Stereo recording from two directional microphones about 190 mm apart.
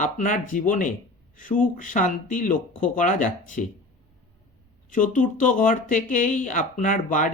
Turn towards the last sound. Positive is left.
turn(degrees=45)  # may be behind; listen again after turning